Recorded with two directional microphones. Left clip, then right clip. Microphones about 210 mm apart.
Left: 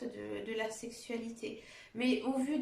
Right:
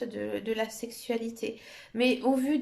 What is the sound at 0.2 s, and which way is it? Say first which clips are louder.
Speech: right 7 dB; 50° right (ahead or behind).